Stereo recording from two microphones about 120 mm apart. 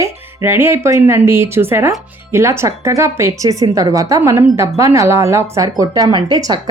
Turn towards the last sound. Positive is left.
turn(degrees=-35)  # may be behind; listen again after turning